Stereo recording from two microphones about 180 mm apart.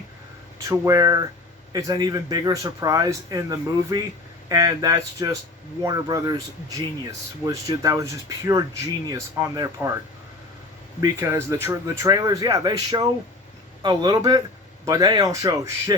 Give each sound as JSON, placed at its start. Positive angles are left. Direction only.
{"t": 0.7, "sound": "speech", "side_deg": -20}
{"t": 11.0, "sound": "speech", "side_deg": -15}